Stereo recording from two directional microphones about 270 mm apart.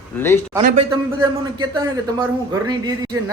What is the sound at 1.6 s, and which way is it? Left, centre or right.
Speech, centre.